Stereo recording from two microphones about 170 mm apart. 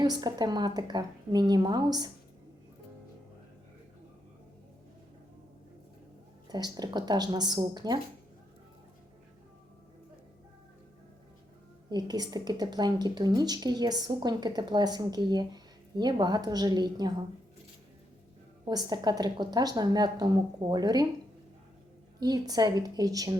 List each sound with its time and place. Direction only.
0.0 s speech: 25° right (ahead or behind)
6.5 s speech: 25° right (ahead or behind)
11.9 s speech: 25° right (ahead or behind)
18.6 s speech: 25° right (ahead or behind)
22.2 s speech: 25° right (ahead or behind)